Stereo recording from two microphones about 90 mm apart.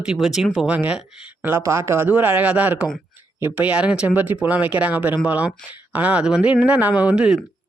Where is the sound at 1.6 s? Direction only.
35° right (ahead or behind).